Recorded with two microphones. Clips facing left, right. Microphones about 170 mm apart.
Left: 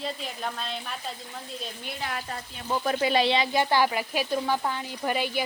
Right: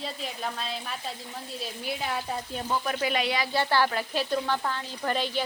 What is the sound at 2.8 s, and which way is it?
Speech, 30° left (ahead or behind).